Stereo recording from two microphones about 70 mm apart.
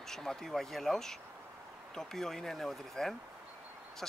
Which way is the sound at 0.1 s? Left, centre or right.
Centre.